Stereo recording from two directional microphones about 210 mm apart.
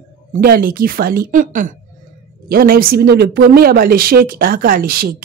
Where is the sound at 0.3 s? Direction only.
45° right (ahead or behind).